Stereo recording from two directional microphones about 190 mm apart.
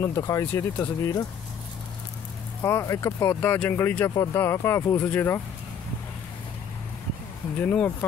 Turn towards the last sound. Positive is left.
turn(degrees=10)  # may be behind; listen again after turning